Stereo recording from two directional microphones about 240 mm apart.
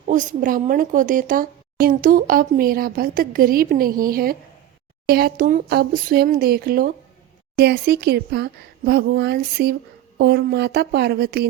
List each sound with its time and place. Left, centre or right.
0.1 s a woman's voice: right